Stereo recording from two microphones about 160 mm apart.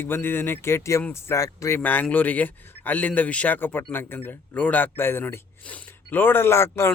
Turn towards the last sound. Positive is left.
turn(degrees=15)  # may be behind; listen again after turning